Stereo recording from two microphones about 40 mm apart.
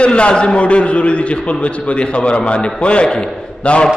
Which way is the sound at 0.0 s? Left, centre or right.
Left.